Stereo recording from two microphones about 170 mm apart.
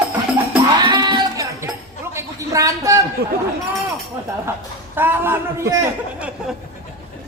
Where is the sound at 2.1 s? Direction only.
15° right (ahead or behind).